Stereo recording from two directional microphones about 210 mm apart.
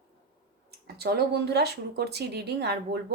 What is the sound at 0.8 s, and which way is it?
Speech, 50° right (ahead or behind).